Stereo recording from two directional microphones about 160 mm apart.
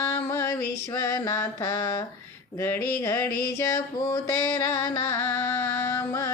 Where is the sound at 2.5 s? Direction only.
15° left (ahead or behind).